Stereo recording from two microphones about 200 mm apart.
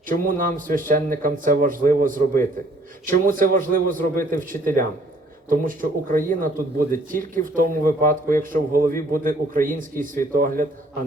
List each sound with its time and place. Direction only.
0.1 s speech: 40° right (ahead or behind)